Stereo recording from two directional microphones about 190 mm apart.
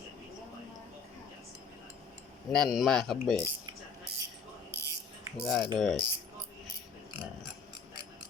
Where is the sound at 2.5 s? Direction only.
Centre (ahead or behind).